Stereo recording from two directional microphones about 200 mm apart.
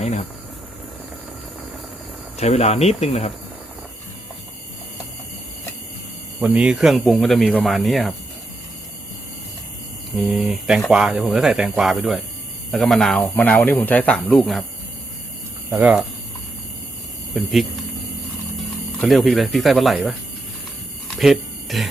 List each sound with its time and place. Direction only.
2.4 s speech: 30° left (ahead or behind)
6.4 s speech: 5° right (ahead or behind)
10.2 s speech: centre (ahead or behind)
15.7 s speech: 5° right (ahead or behind)
17.3 s speech: centre (ahead or behind)
21.2 s speech: centre (ahead or behind)